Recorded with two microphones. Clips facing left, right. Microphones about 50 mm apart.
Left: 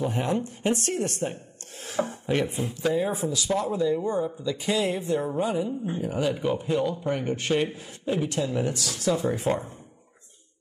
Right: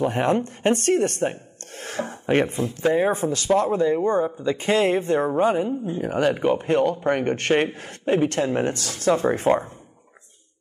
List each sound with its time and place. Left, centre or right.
0.0 s speech: right